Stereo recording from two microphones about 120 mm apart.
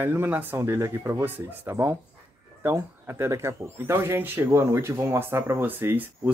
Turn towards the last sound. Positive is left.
turn(degrees=-15)  # may be behind; listen again after turning